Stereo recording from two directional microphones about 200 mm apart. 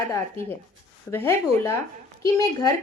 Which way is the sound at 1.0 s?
10° left (ahead or behind).